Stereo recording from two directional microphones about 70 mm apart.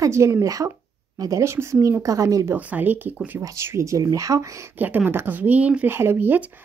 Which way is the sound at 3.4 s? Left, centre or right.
Right.